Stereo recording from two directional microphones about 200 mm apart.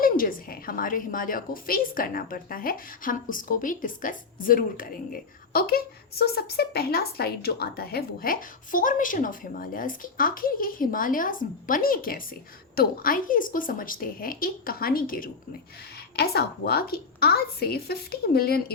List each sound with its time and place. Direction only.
0.0 s a woman's voice: 45° left (ahead or behind)